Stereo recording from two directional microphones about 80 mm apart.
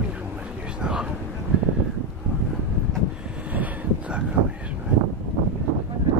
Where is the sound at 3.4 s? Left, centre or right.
Centre.